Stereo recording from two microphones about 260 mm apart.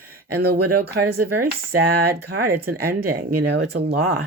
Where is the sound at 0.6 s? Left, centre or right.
Right.